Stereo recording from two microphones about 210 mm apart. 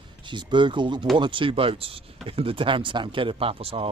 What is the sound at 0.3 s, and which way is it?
Speech, 20° right (ahead or behind).